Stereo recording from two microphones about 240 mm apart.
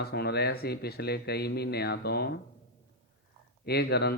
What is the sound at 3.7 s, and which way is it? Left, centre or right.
Speech, left.